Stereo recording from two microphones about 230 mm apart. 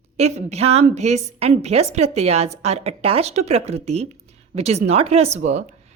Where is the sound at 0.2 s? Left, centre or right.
Right.